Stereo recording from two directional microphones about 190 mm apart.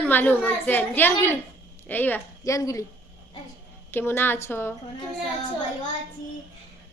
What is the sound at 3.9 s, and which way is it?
Speech, 10° left (ahead or behind).